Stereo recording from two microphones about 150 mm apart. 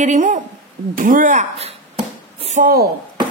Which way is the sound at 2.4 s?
50° right (ahead or behind).